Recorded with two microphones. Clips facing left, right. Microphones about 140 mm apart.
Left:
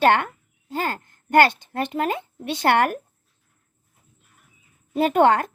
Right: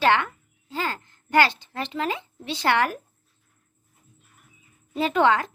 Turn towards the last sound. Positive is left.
turn(degrees=50)  # may be behind; listen again after turning